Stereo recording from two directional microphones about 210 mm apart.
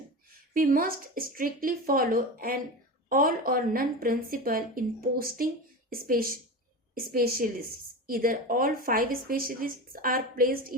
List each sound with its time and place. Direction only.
0.5 s a woman's voice: 40° right (ahead or behind)